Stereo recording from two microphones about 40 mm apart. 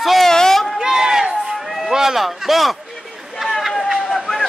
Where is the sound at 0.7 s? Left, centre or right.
Centre.